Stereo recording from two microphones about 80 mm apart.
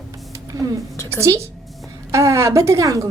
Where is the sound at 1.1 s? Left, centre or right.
Right.